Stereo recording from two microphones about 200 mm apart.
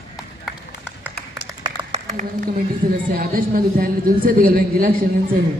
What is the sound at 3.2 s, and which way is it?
A woman's voice, 45° right (ahead or behind).